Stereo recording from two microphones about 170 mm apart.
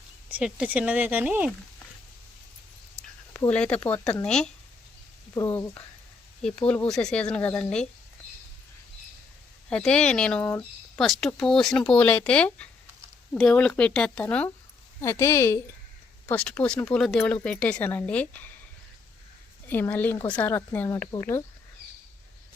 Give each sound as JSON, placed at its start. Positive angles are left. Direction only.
{"t": 0.3, "sound": "speech", "side_deg": -10}
{"t": 3.3, "sound": "speech", "side_deg": 10}
{"t": 5.3, "sound": "speech", "side_deg": 15}
{"t": 9.6, "sound": "speech", "side_deg": 5}
{"t": 19.6, "sound": "speech", "side_deg": 10}